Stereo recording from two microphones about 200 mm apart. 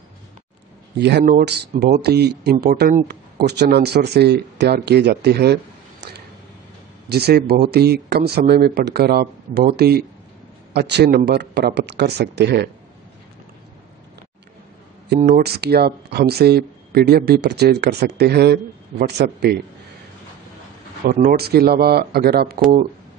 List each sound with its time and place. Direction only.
0.9 s speech: 60° right (ahead or behind)
15.1 s speech: 45° right (ahead or behind)
21.1 s speech: 45° right (ahead or behind)